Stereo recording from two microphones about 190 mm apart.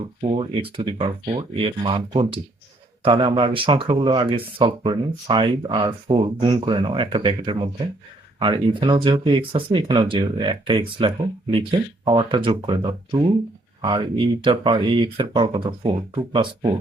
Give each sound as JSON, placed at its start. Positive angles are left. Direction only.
{"t": 0.0, "sound": "speech", "side_deg": -30}
{"t": 14.4, "sound": "speech", "side_deg": -25}